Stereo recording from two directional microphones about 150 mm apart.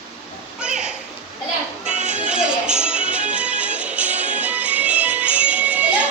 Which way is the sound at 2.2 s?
5° right (ahead or behind).